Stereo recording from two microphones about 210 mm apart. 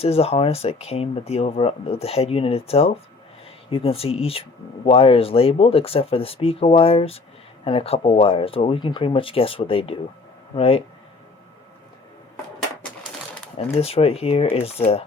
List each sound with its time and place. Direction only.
0.0 s speech: 30° left (ahead or behind)
13.6 s speech: 30° left (ahead or behind)